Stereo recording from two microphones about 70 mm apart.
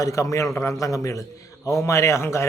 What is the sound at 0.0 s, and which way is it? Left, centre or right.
A man's voice, left.